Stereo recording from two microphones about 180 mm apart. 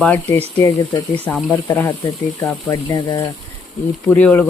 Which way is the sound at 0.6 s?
20° left (ahead or behind).